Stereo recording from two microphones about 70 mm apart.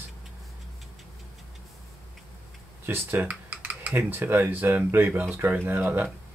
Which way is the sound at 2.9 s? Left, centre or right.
Right.